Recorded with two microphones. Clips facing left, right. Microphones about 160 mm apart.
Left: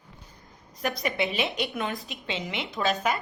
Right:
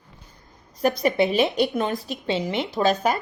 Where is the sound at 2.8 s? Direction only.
30° right (ahead or behind).